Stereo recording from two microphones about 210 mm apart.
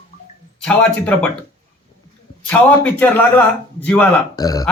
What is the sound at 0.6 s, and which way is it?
Speech, 5° left (ahead or behind).